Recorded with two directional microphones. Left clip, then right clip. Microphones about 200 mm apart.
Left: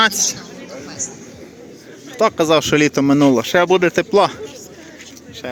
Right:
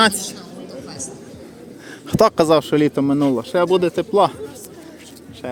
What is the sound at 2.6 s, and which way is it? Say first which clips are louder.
A man's voice: left 3 dB; centre (ahead or behind).